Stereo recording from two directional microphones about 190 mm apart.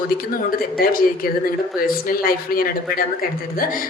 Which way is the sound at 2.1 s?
50° left (ahead or behind).